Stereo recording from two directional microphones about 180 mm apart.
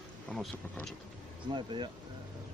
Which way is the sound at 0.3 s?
Centre (ahead or behind).